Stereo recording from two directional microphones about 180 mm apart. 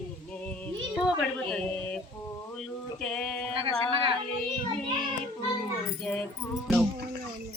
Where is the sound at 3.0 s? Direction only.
5° left (ahead or behind).